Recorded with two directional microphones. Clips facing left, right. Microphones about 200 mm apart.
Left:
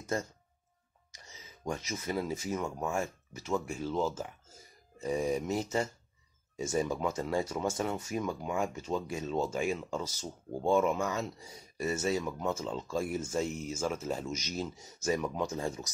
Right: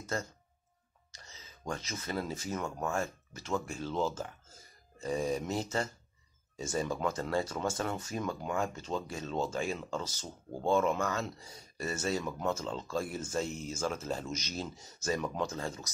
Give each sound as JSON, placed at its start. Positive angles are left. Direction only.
{"t": 0.1, "sound": "speech", "side_deg": 20}